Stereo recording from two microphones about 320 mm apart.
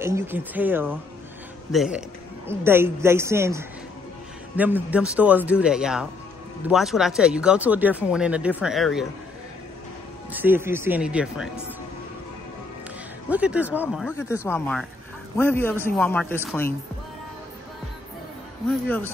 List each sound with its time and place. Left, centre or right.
0.0 s a woman's voice: centre
10.3 s speech: centre
13.3 s a man's voice: centre
18.9 s a man's voice: centre